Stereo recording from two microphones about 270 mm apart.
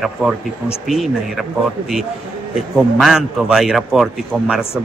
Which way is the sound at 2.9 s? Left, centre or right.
Centre.